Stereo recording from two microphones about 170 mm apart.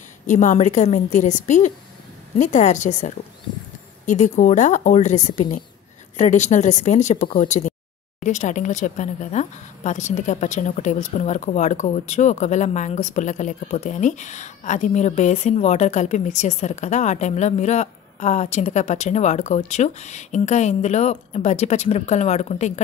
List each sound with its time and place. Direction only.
0.3 s speech: 45° left (ahead or behind)